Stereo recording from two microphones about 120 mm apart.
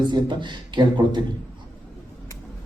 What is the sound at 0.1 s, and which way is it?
A man's voice, 40° right (ahead or behind).